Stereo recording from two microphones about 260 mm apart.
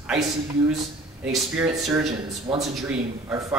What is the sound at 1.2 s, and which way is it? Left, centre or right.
Speech, centre.